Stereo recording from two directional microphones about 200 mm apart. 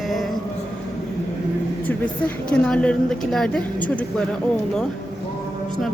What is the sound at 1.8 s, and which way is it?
A woman's voice, 5° left (ahead or behind).